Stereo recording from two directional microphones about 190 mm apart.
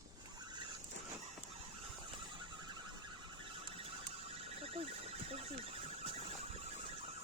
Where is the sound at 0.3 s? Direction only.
25° right (ahead or behind).